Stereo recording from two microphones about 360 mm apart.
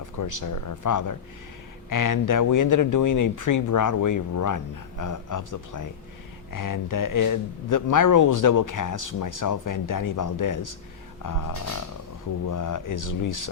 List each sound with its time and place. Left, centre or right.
0.0 s speech: left